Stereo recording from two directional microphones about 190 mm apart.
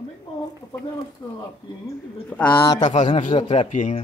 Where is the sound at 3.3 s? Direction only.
30° left (ahead or behind).